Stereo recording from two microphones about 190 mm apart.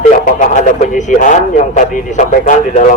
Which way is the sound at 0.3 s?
40° left (ahead or behind).